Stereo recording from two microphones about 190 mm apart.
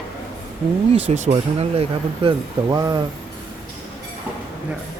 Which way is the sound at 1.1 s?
35° right (ahead or behind).